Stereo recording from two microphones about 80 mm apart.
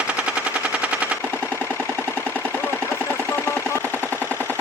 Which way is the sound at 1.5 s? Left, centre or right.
Left.